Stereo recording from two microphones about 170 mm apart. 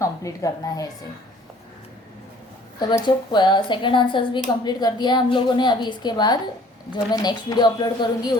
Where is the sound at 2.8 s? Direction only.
25° left (ahead or behind).